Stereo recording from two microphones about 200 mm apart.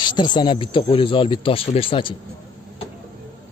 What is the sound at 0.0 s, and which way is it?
Speech, 20° left (ahead or behind).